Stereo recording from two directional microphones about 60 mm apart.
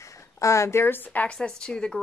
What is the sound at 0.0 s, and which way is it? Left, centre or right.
Speech, left.